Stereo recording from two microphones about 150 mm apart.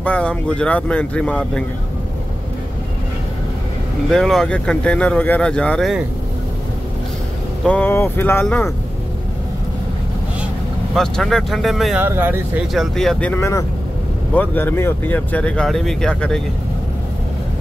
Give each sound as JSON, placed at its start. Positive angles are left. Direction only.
{"t": 0.0, "sound": "speech", "side_deg": 5}
{"t": 4.1, "sound": "speech", "side_deg": 5}
{"t": 7.6, "sound": "speech", "side_deg": 10}
{"t": 11.0, "sound": "speech", "side_deg": 0}
{"t": 12.0, "sound": "speech", "side_deg": -15}
{"t": 12.7, "sound": "speech", "side_deg": 5}
{"t": 13.4, "sound": "speech", "side_deg": 20}